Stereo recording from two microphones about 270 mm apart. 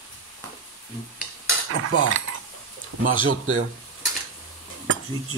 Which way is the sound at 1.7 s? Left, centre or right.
Right.